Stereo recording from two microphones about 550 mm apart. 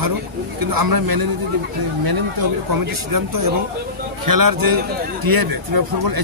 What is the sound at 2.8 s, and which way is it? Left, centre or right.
Speech, right.